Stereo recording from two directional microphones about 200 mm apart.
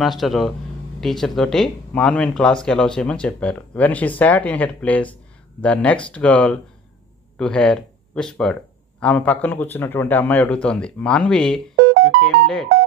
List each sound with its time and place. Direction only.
0.0 s a man's voice: centre (ahead or behind)